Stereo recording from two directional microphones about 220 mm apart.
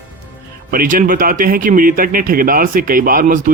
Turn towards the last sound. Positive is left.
turn(degrees=-35)  # may be behind; listen again after turning